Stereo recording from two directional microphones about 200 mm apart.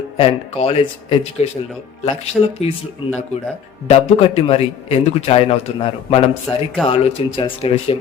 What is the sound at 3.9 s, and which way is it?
A man's voice, 30° left (ahead or behind).